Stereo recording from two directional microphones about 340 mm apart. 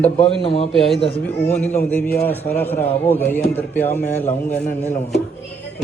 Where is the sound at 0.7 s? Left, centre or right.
Centre.